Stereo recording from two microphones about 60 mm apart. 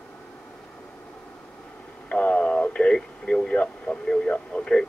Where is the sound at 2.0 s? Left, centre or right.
Centre.